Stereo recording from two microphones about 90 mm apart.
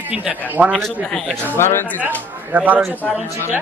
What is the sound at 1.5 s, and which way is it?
Speech, 25° left (ahead or behind).